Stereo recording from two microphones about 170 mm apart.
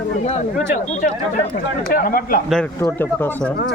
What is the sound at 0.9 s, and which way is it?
Speech, 45° left (ahead or behind).